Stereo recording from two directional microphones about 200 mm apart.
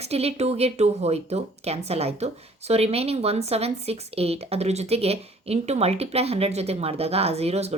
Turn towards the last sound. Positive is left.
turn(degrees=-30)  # may be behind; listen again after turning